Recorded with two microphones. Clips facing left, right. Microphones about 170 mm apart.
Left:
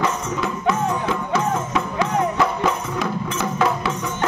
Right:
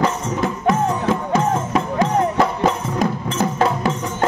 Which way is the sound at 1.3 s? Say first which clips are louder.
Right 2 dB; 45° right (ahead or behind).